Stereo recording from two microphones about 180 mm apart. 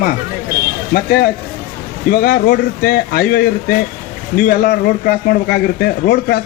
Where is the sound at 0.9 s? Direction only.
60° left (ahead or behind).